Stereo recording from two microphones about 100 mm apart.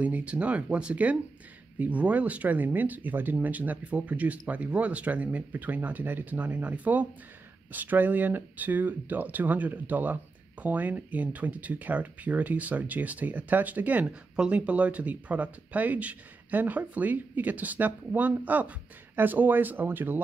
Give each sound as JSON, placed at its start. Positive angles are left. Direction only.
{"t": 0.0, "sound": "speech", "side_deg": -15}